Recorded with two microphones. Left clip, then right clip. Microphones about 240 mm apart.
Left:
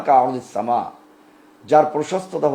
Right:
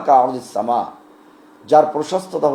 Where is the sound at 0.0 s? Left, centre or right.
Left.